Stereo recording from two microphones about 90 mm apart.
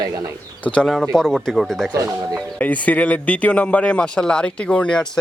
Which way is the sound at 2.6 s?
15° left (ahead or behind).